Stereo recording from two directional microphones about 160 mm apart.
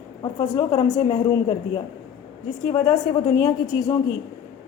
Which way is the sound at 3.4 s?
25° left (ahead or behind).